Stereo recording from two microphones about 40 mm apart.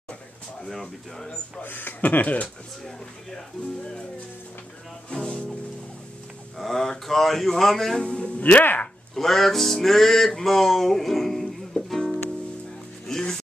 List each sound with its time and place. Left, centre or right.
0.7 s speech: centre
1.6 s speech: left
5.1 s speech: left
6.6 s speech: centre
8.0 s speech: left
8.4 s speech: left
9.1 s music: centre